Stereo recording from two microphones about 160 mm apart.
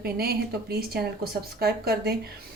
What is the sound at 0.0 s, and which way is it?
Speech, 75° right (ahead or behind).